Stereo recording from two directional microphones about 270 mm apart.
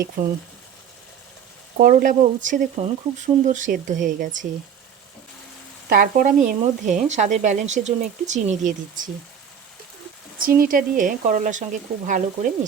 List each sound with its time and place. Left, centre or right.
1.8 s speech: right
5.9 s speech: right
10.4 s speech: right